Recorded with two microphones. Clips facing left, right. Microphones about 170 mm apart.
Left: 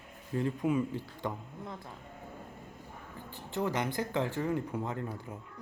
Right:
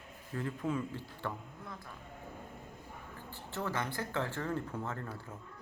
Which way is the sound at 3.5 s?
15° left (ahead or behind).